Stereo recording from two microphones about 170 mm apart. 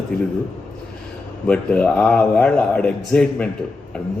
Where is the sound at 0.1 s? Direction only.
70° left (ahead or behind).